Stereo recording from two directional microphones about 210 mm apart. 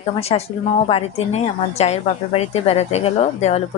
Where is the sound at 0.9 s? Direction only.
30° left (ahead or behind).